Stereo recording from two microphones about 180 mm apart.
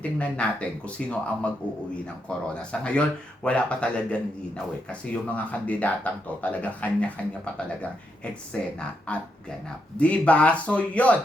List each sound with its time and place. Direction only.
0.0 s a man's voice: 5° left (ahead or behind)
2.6 s a man's voice: 5° left (ahead or behind)